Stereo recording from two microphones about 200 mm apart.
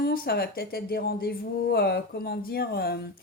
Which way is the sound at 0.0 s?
50° left (ahead or behind).